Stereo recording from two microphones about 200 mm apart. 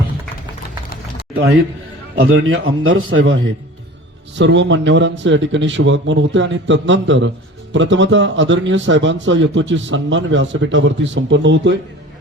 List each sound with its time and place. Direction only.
2.1 s a man's voice: 90° right
4.4 s a man's voice: 65° right (ahead or behind)